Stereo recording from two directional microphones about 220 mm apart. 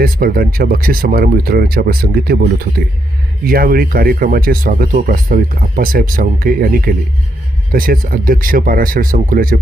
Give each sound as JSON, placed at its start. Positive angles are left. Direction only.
{"t": 0.0, "sound": "speech", "side_deg": -40}